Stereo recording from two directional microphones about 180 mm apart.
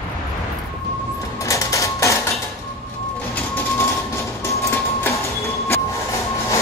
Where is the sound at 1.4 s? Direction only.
15° left (ahead or behind).